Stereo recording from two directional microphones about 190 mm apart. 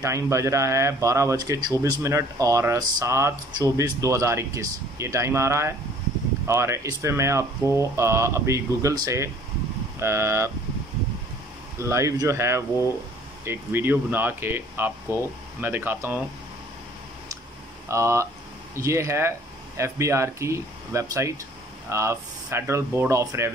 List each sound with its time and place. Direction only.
0.0 s speech: 15° right (ahead or behind)
11.8 s speech: 15° right (ahead or behind)
17.8 s speech: 15° right (ahead or behind)